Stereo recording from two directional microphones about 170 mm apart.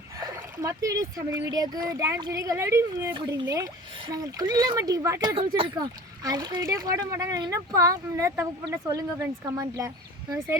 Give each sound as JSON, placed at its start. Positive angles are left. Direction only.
{"t": 0.2, "sound": "speech", "side_deg": -20}
{"t": 3.2, "sound": "speech", "side_deg": -25}